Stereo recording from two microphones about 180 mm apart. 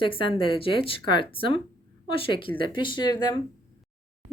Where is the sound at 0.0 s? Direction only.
30° left (ahead or behind).